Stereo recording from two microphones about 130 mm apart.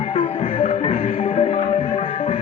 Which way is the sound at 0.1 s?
50° left (ahead or behind).